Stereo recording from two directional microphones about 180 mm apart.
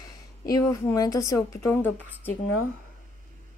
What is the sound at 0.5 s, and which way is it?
Speech, 20° left (ahead or behind).